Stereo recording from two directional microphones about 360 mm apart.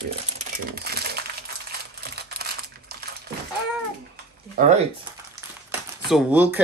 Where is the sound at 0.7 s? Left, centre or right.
Right.